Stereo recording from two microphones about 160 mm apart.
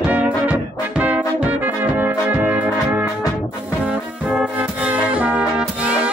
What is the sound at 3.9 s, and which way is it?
Music, 5° right (ahead or behind).